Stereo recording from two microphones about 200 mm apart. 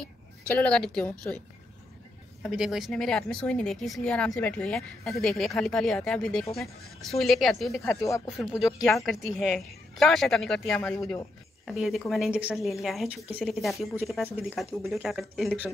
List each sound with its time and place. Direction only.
0.5 s speech: 5° left (ahead or behind)
2.4 s speech: 5° right (ahead or behind)
7.8 s speech: 15° left (ahead or behind)
8.3 s speech: centre (ahead or behind)
11.0 s speech: 15° left (ahead or behind)
11.6 s speech: centre (ahead or behind)